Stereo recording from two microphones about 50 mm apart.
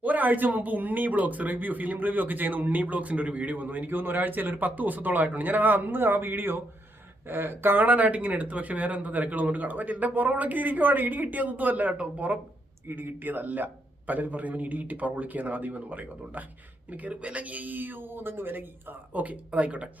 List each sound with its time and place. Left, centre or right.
0.0 s speech: right
7.9 s speech: right
12.9 s speech: right